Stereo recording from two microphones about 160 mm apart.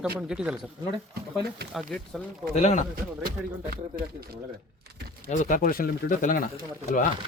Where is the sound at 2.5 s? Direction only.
50° left (ahead or behind).